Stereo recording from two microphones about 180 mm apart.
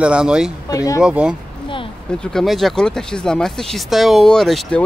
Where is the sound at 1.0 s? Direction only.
5° right (ahead or behind).